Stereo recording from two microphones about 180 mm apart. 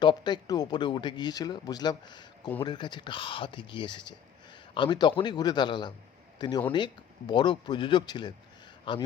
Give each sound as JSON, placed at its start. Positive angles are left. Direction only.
{"t": 0.0, "sound": "speech", "side_deg": 25}